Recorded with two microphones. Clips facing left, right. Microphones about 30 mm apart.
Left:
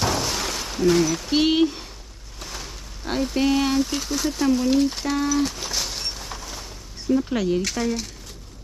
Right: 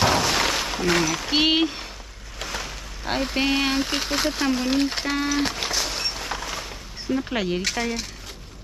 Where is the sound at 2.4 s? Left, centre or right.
Right.